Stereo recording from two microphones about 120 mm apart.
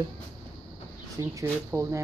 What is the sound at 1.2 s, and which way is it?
Speech, 25° right (ahead or behind).